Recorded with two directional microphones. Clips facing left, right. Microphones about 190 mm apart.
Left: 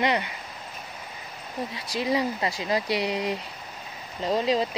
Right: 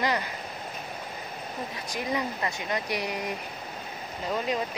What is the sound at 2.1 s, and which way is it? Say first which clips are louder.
Speech: left 5 dB; 30° left (ahead or behind).